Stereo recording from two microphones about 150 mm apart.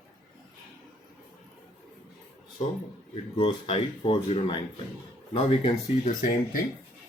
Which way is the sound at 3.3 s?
35° left (ahead or behind).